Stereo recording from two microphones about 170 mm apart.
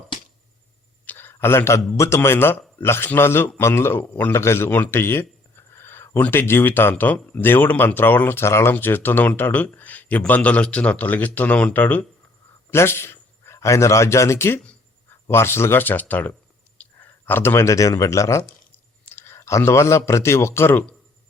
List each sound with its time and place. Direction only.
1.0 s a man's voice: 10° left (ahead or behind)